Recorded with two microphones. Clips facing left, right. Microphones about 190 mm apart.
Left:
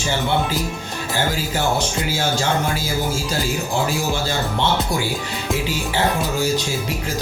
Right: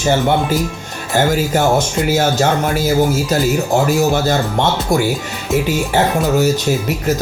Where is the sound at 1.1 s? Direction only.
50° right (ahead or behind).